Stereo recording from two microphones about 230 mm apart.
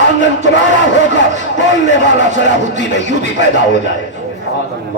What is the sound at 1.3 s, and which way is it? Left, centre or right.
Speech, right.